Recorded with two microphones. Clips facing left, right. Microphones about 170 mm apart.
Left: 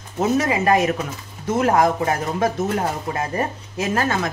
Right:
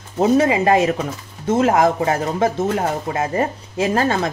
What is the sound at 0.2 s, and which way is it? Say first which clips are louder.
Speech: right 4 dB; 25° right (ahead or behind).